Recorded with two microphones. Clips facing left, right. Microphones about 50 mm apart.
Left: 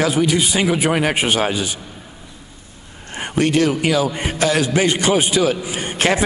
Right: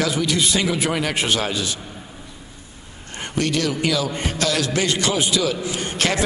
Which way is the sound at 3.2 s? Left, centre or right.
Left.